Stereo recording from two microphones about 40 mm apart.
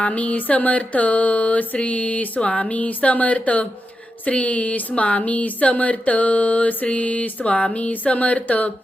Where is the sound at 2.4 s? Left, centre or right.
Left.